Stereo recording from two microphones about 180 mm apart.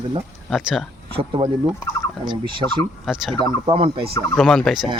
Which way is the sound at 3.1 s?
Centre (ahead or behind).